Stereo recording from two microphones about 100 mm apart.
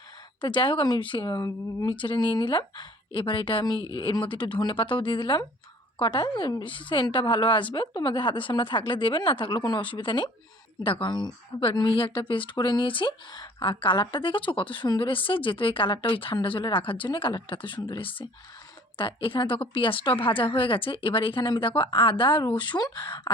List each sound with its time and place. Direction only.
0.4 s speech: 55° left (ahead or behind); by 1.9 s 35° left (ahead or behind)
1.9 s a woman's voice: 55° left (ahead or behind)
10.8 s a woman's voice: 65° left (ahead or behind)
11.1 s a woman's voice: 50° left (ahead or behind)